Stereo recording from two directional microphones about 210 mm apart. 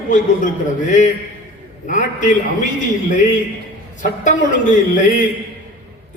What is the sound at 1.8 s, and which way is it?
Speech, 35° left (ahead or behind).